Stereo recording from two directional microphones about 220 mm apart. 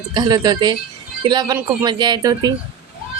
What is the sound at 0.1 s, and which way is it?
Speech, 20° right (ahead or behind).